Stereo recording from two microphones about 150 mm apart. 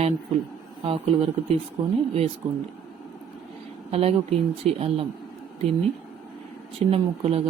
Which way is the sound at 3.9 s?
40° right (ahead or behind).